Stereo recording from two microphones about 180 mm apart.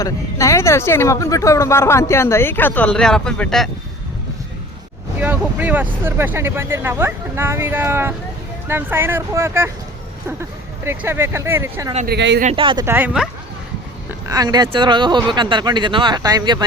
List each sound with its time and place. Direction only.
0.0 s speech: 15° left (ahead or behind)
5.2 s speech: 10° right (ahead or behind)
10.8 s speech: 15° right (ahead or behind)
12.0 s speech: 70° right (ahead or behind)
12.5 s speech: 25° right (ahead or behind)
12.8 s speech: 10° right (ahead or behind)